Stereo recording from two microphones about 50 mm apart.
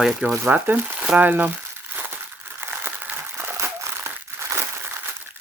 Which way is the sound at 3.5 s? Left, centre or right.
Right.